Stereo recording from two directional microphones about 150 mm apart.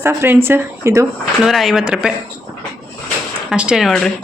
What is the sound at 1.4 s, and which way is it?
Speech, centre (ahead or behind).